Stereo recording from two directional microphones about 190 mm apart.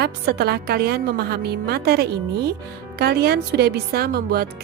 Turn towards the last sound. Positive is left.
turn(degrees=-55)  # may be behind; listen again after turning